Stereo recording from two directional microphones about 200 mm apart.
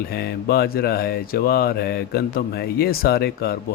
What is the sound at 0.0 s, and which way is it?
Speech, 50° left (ahead or behind).